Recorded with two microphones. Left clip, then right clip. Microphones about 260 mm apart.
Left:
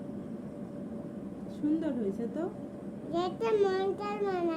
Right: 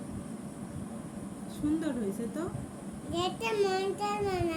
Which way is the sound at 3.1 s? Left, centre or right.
Centre.